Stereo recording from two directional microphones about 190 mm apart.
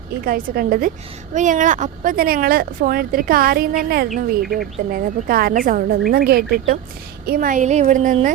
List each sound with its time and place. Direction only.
0.3 s a woman's voice: 50° right (ahead or behind)